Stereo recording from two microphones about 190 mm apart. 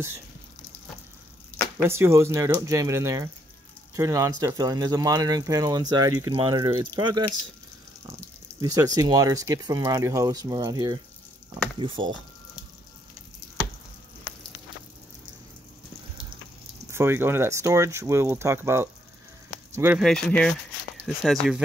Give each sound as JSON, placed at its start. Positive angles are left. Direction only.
{"t": 1.8, "sound": "speech", "side_deg": -15}
{"t": 8.5, "sound": "speech", "side_deg": -20}
{"t": 16.9, "sound": "speech", "side_deg": -15}
{"t": 20.0, "sound": "speech", "side_deg": 5}